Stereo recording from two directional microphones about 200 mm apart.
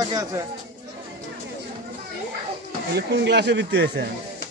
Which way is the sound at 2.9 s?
60° right (ahead or behind).